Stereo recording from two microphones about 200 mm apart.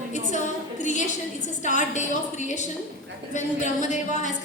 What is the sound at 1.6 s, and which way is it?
A woman's voice, 40° left (ahead or behind).